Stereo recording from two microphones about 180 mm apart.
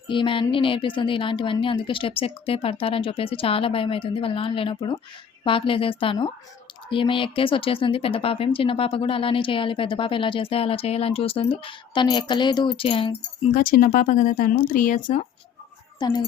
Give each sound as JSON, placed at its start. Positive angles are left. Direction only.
{"t": 0.1, "sound": "speech", "side_deg": 30}
{"t": 13.5, "sound": "speech", "side_deg": 50}
{"t": 16.0, "sound": "speech", "side_deg": 25}